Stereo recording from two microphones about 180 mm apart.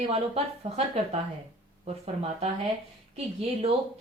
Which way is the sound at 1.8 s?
35° right (ahead or behind).